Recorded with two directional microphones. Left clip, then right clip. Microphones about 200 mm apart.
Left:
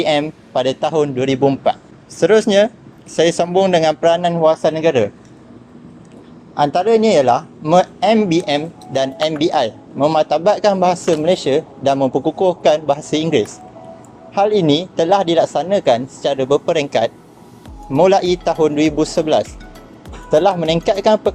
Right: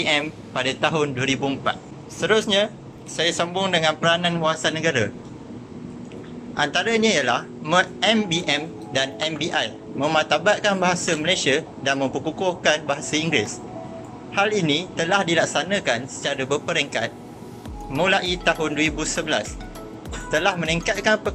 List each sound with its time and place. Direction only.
0.0 s speech: 25° left (ahead or behind)
6.6 s speech: 25° left (ahead or behind)